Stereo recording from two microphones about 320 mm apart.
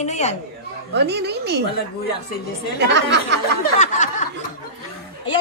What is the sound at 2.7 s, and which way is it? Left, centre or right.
Speech, right.